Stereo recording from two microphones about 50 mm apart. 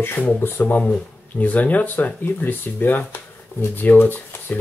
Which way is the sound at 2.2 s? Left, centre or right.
Left.